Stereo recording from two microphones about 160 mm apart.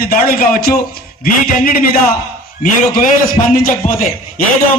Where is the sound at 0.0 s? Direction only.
65° left (ahead or behind).